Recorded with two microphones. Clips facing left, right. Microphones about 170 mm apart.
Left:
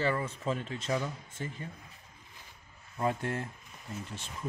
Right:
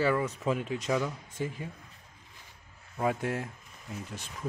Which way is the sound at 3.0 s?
10° right (ahead or behind).